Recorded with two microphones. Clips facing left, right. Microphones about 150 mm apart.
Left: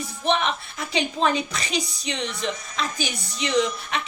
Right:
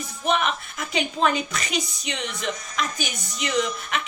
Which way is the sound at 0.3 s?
30° left (ahead or behind).